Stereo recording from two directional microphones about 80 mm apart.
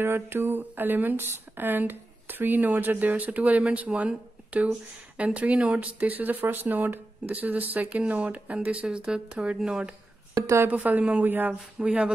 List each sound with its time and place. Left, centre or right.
0.0 s speech: right; by 9.8 s centre
10.3 s speech: right
10.7 s speech: centre